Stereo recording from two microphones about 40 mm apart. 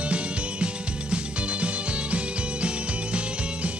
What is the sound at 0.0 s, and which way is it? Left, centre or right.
Music, right.